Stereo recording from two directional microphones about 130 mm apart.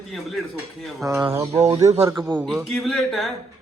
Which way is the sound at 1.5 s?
55° right (ahead or behind).